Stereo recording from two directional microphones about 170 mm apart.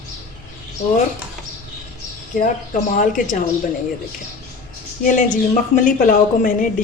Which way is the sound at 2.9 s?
50° left (ahead or behind).